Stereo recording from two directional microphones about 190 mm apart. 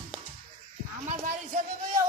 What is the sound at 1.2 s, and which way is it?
Speech, 45° right (ahead or behind).